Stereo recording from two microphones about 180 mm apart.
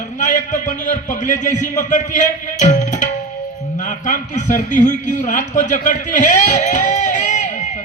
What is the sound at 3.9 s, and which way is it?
A man's voice, 45° left (ahead or behind).